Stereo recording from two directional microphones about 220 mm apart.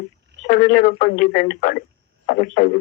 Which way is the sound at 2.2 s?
40° left (ahead or behind).